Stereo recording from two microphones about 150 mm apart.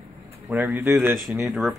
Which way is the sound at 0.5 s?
15° right (ahead or behind).